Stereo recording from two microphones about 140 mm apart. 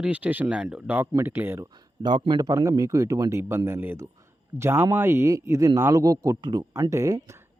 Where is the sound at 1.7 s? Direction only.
30° right (ahead or behind).